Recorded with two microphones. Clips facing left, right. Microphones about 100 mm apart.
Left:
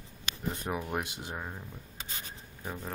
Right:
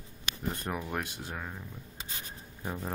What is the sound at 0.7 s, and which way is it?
Speech, 10° left (ahead or behind).